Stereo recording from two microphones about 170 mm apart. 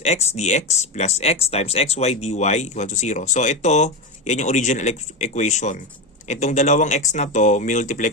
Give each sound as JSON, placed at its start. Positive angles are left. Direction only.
{"t": 0.0, "sound": "speech", "side_deg": 40}